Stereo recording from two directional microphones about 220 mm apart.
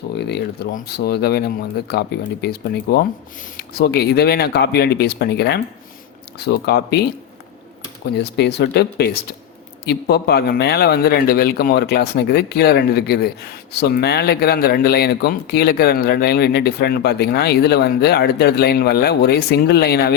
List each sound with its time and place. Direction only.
0.2 s a man's voice: 50° left (ahead or behind)
8.1 s a man's voice: 50° left (ahead or behind)